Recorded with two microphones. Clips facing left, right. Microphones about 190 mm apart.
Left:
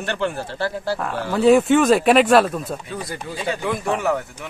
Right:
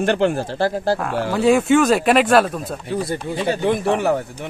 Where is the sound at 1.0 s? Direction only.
Centre (ahead or behind).